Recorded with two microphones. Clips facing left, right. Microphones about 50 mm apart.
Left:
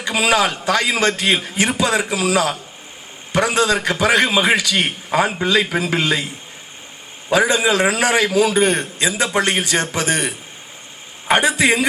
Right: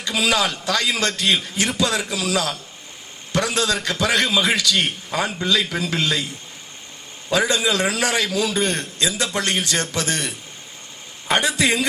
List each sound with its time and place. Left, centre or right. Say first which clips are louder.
0.0 s a man's voice: left 4 dB; left
7.3 s a man's voice: left 4 dB; left